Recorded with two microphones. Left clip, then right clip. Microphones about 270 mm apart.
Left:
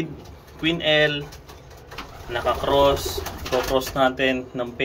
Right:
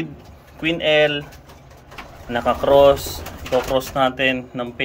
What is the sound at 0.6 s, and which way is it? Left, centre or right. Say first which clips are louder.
Speech: right 3 dB; centre.